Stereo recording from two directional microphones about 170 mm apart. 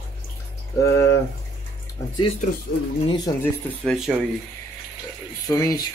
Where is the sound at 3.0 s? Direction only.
25° left (ahead or behind).